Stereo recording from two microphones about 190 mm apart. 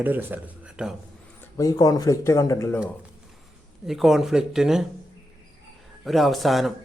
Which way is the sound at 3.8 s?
Centre (ahead or behind).